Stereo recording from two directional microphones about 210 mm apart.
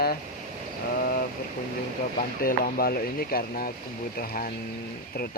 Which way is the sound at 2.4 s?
45° left (ahead or behind).